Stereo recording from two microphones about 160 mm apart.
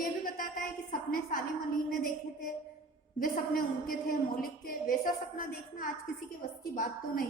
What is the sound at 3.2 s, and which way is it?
A woman's voice, 65° left (ahead or behind).